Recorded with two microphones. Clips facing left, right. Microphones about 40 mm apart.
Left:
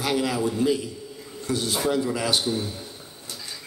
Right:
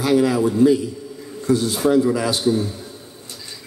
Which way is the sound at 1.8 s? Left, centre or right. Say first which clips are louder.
Right 8 dB; right.